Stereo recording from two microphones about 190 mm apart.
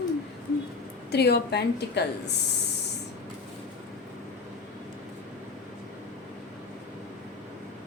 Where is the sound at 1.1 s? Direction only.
60° left (ahead or behind).